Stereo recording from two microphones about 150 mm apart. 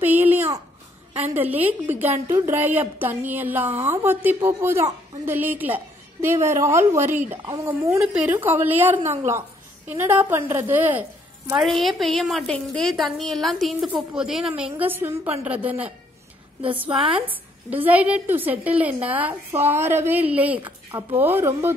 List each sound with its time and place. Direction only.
0.0 s a sound: 10° right (ahead or behind)
1.3 s speech: 10° right (ahead or behind)
9.0 s a woman's voice: 50° right (ahead or behind)
9.8 s speech: 10° right (ahead or behind)
11.6 s a woman's voice: centre (ahead or behind)
16.9 s speech: 35° right (ahead or behind)
17.3 s speech: 10° right (ahead or behind)